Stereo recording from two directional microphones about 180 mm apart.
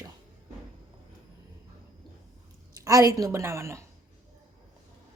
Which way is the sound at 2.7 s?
20° right (ahead or behind).